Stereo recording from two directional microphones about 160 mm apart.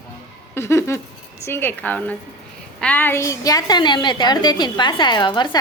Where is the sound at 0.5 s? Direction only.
15° left (ahead or behind).